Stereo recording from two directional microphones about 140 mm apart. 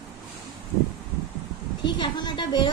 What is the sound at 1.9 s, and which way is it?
Speech, 30° left (ahead or behind).